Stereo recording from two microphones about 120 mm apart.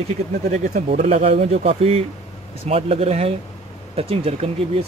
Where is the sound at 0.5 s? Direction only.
75° right (ahead or behind).